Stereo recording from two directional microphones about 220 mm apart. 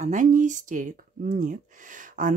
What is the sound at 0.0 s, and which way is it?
Speech, 35° right (ahead or behind).